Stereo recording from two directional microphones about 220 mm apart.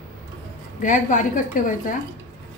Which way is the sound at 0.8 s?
35° left (ahead or behind).